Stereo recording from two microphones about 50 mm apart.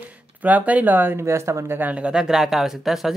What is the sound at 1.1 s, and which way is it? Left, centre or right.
Speech, right.